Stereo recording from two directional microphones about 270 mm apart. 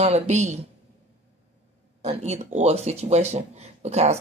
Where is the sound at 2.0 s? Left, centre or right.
Right.